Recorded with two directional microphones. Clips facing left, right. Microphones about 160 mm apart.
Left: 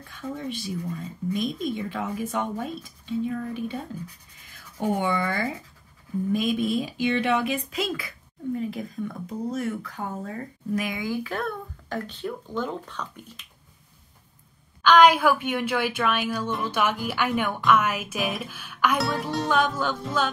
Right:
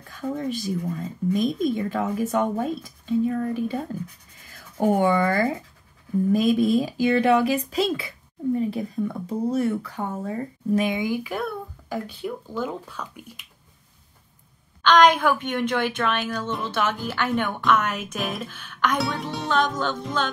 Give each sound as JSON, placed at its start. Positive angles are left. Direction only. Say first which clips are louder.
{"t": 0.1, "sound": "speech", "louder": "right 5 dB", "side_deg": -40}
{"t": 6.3, "sound": "speech", "louder": "right 5 dB", "side_deg": -40}
{"t": 14.8, "sound": "a woman's voice", "louder": "even", "side_deg": 5}